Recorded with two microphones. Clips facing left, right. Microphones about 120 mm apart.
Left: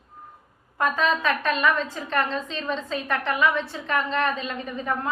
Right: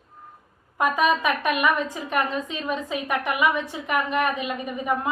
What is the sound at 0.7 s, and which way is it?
A woman's voice, 15° right (ahead or behind).